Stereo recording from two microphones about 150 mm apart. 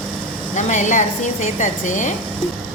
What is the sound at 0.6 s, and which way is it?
A woman's voice, 55° left (ahead or behind).